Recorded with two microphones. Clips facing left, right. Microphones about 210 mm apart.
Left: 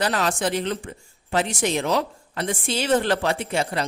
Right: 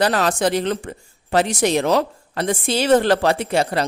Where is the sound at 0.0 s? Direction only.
40° right (ahead or behind).